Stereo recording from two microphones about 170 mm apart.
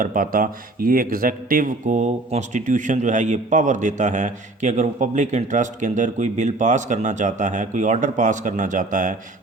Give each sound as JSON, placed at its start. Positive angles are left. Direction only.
{"t": 0.0, "sound": "speech", "side_deg": -55}